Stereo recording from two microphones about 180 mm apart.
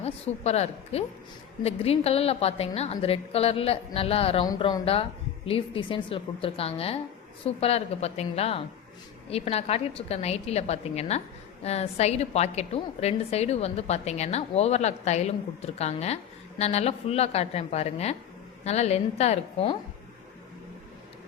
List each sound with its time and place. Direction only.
0.0 s a woman's voice: 35° left (ahead or behind)
4.4 s a woman's voice: 20° left (ahead or behind)